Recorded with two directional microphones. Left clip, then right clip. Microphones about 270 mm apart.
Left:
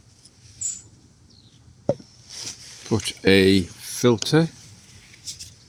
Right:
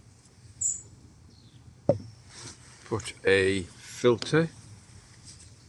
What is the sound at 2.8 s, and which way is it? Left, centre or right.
Speech, left.